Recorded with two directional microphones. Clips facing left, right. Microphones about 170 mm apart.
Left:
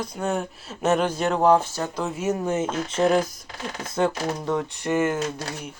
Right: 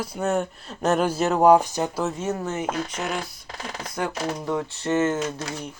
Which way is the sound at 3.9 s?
25° left (ahead or behind).